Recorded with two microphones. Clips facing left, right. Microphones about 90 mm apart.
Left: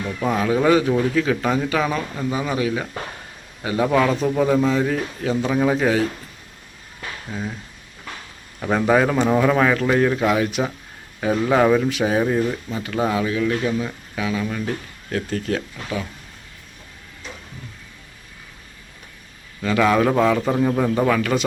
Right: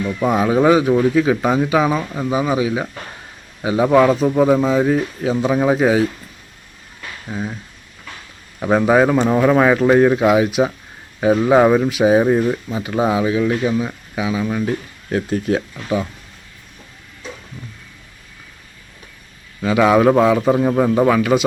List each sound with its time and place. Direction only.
0.2 s speech: 20° right (ahead or behind)
7.3 s speech: 20° right (ahead or behind)
8.6 s speech: 10° right (ahead or behind)
19.6 s speech: 15° right (ahead or behind)